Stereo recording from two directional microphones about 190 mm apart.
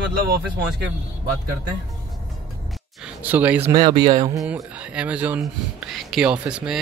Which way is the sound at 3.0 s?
10° right (ahead or behind).